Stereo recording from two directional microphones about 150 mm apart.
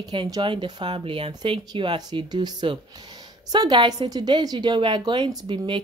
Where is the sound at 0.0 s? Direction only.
30° right (ahead or behind).